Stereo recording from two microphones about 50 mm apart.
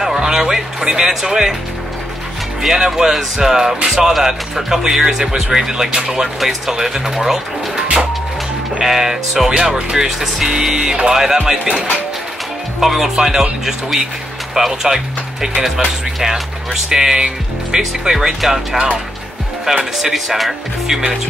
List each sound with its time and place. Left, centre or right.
0.0 s speech: centre
2.6 s speech: centre
12.8 s speech: centre
16.2 s speech: centre